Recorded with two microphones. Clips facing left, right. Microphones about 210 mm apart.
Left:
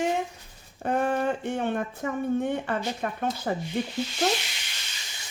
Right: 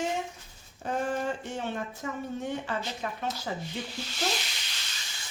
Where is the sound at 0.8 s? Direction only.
60° left (ahead or behind).